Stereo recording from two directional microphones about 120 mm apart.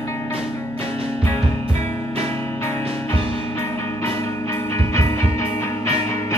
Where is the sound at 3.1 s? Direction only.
20° left (ahead or behind).